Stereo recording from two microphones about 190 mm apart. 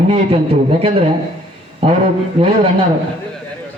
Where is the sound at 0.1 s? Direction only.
30° right (ahead or behind).